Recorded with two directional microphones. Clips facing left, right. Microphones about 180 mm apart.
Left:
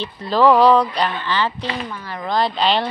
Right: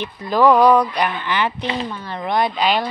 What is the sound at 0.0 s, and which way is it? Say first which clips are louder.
Speech: even; 15° right (ahead or behind).